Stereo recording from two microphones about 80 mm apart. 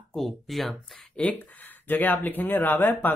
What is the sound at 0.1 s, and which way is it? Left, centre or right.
Speech, centre.